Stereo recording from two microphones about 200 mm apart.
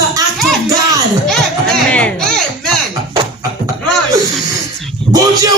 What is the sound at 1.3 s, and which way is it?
Music, 5° left (ahead or behind).